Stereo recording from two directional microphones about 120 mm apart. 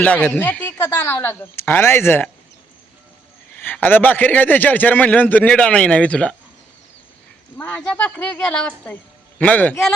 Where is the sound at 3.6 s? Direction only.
15° left (ahead or behind).